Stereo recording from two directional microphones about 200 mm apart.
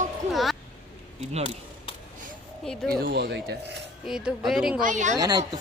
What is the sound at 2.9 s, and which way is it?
Speech, 50° right (ahead or behind).